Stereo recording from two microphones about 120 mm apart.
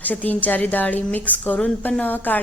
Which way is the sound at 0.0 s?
15° left (ahead or behind).